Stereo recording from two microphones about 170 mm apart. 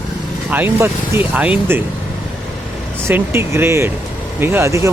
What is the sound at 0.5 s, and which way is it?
Speech, 10° right (ahead or behind).